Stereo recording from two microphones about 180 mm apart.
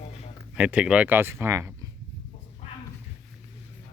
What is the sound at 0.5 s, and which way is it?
Speech, 5° right (ahead or behind).